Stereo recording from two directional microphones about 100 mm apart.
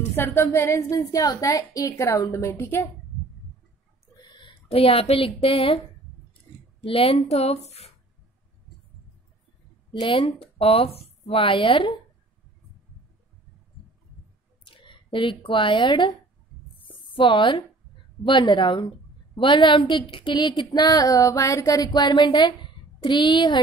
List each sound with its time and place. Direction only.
0.1 s a woman's voice: 25° left (ahead or behind)
4.2 s speech: 55° left (ahead or behind); by 5.8 s 70° left (ahead or behind)
6.8 s speech: 75° left (ahead or behind); by 7.9 s 90° left
9.9 s speech: 55° left (ahead or behind)
14.7 s speech: 55° left (ahead or behind)
16.8 s a sound: 55° left (ahead or behind)
18.2 s a woman's voice: 50° left (ahead or behind)